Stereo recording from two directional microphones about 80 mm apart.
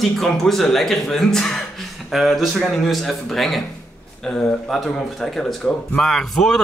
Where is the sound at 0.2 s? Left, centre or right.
Centre.